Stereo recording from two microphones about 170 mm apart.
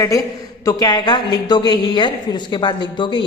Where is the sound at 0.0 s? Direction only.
20° left (ahead or behind).